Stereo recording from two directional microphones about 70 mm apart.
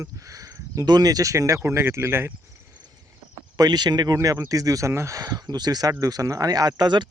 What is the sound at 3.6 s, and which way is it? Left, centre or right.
Speech, right.